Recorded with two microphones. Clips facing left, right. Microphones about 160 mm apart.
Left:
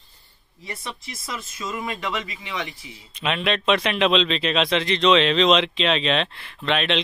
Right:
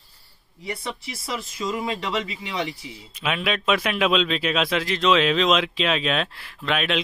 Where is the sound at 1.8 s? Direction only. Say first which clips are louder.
Even; 30° right (ahead or behind).